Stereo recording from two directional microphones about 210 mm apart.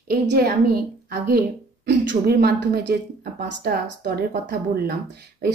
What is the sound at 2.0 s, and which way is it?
A woman's voice, 50° right (ahead or behind).